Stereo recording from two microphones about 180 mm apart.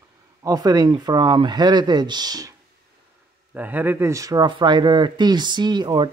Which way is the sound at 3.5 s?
10° right (ahead or behind).